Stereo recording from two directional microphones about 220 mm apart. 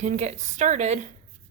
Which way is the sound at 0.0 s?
30° right (ahead or behind).